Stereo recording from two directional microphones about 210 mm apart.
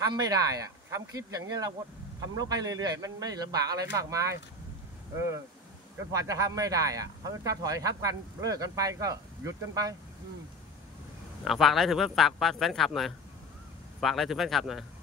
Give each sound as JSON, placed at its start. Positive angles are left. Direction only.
{"t": 0.0, "sound": "speech", "side_deg": -15}
{"t": 6.1, "sound": "speech", "side_deg": -15}
{"t": 11.4, "sound": "speech", "side_deg": 0}